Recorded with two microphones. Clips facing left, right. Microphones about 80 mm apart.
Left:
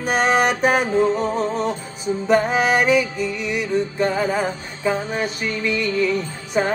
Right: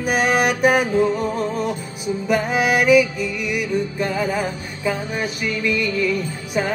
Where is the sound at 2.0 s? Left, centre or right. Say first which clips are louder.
Left 3 dB; left.